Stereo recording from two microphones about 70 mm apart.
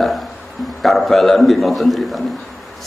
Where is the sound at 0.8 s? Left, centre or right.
Centre.